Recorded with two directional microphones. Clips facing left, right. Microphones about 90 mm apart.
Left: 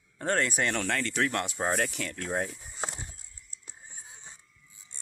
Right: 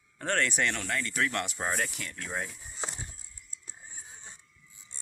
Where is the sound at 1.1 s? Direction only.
25° left (ahead or behind).